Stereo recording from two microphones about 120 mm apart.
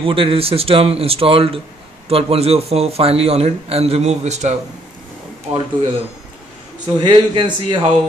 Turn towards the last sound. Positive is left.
turn(degrees=-40)  # may be behind; listen again after turning